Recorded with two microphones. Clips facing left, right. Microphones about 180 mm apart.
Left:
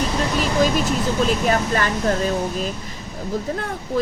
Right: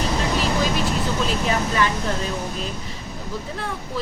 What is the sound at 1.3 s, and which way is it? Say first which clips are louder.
Speech: left 4 dB; 45° left (ahead or behind).